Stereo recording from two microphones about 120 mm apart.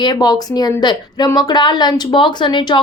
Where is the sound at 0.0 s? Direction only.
35° left (ahead or behind).